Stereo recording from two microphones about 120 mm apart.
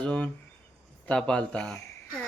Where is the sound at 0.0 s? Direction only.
10° left (ahead or behind).